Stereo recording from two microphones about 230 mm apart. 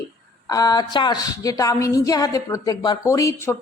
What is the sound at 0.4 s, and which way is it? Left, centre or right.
A woman's voice, centre.